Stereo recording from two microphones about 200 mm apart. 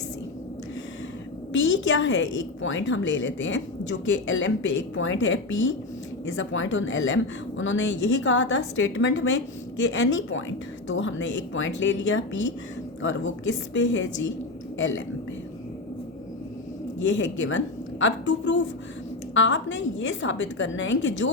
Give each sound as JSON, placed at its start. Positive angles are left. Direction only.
{"t": 1.5, "sound": "a woman's voice", "side_deg": 65}
{"t": 17.0, "sound": "a woman's voice", "side_deg": 65}